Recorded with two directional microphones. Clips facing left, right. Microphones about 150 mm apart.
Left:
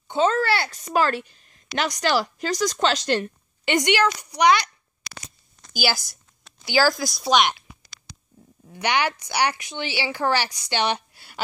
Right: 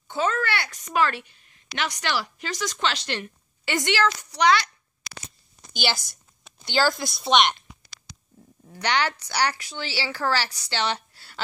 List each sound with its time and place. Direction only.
0.1 s a woman's voice: 30° left (ahead or behind)
3.6 s a woman's voice: 20° left (ahead or behind)
5.7 s a woman's voice: 5° left (ahead or behind)
8.6 s a woman's voice: 10° left (ahead or behind)